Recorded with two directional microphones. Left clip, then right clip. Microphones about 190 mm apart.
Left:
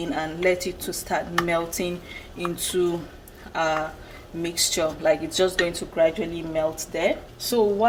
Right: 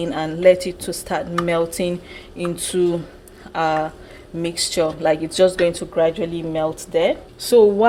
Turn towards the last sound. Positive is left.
turn(degrees=-60)  # may be behind; listen again after turning